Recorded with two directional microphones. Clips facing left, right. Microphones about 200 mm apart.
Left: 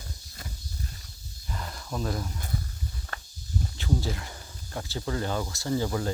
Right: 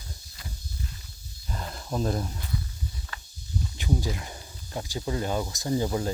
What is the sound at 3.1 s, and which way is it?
Walk, 50° left (ahead or behind).